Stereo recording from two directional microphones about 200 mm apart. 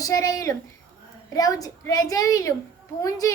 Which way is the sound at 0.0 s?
15° left (ahead or behind).